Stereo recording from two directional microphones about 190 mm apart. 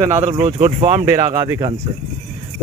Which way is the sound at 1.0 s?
15° right (ahead or behind).